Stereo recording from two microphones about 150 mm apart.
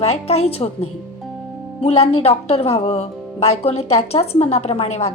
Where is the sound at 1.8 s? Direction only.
40° left (ahead or behind).